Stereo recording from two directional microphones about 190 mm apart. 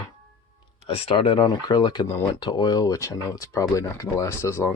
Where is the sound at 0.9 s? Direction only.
30° left (ahead or behind).